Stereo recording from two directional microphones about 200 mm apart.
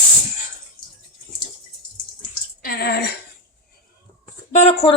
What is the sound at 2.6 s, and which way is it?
Bathtub, 50° left (ahead or behind).